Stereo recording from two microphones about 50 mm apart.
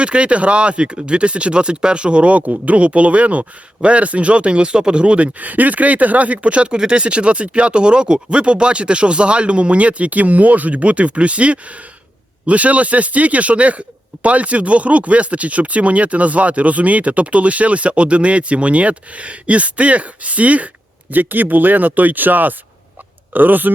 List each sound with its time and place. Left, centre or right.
0.0 s a man's voice: right